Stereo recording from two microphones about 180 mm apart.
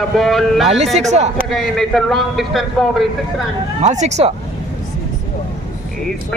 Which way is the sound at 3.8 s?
40° right (ahead or behind).